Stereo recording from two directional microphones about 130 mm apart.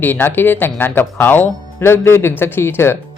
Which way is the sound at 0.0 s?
15° left (ahead or behind).